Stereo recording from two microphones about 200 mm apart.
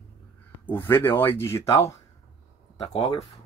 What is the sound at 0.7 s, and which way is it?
Speech, 10° left (ahead or behind).